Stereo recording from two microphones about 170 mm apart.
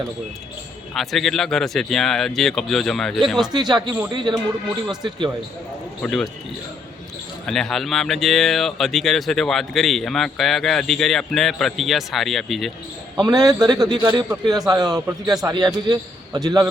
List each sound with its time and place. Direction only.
0.9 s speech: centre (ahead or behind)
3.5 s a man's voice: 25° right (ahead or behind)
6.0 s speech: 5° left (ahead or behind)
7.4 s speech: centre (ahead or behind)
13.1 s a man's voice: 20° right (ahead or behind)